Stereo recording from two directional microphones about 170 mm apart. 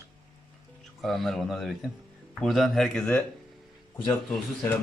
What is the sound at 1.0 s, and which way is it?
A man's voice, centre (ahead or behind).